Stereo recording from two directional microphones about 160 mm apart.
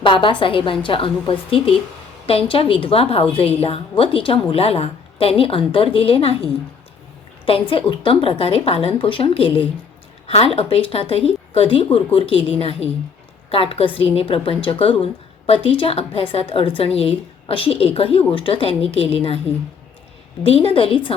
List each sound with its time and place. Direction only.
0.0 s a woman's voice: 30° left (ahead or behind)
7.7 s a woman's voice: 35° left (ahead or behind)
20.4 s a woman's voice: 35° left (ahead or behind)